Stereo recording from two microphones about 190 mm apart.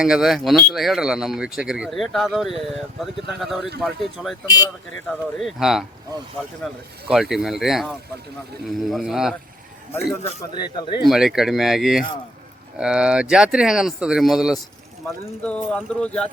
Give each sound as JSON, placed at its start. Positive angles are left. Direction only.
{"t": 0.0, "sound": "speech", "side_deg": -5}
{"t": 4.4, "sound": "speech", "side_deg": 20}
{"t": 5.0, "sound": "speech", "side_deg": 0}
{"t": 7.1, "sound": "speech", "side_deg": 0}
{"t": 10.4, "sound": "speech", "side_deg": 25}
{"t": 11.0, "sound": "speech", "side_deg": 0}